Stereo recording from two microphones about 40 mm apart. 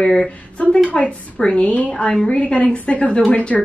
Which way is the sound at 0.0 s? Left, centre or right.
Centre.